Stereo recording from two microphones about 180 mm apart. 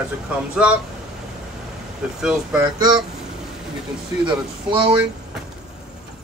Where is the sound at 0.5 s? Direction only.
5° right (ahead or behind).